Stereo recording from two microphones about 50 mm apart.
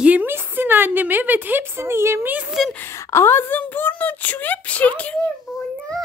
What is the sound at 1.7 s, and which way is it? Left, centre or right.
Speech, right.